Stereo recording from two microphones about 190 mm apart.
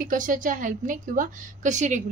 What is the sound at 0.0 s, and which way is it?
A woman's voice, 45° right (ahead or behind).